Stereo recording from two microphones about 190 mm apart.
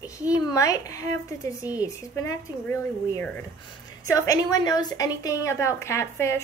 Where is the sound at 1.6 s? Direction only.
10° right (ahead or behind).